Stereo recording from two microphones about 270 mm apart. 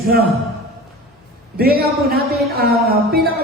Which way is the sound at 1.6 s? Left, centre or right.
Right.